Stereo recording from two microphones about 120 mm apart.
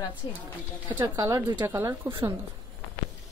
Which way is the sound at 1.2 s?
30° right (ahead or behind).